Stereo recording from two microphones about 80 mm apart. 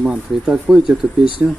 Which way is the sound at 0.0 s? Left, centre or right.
Centre.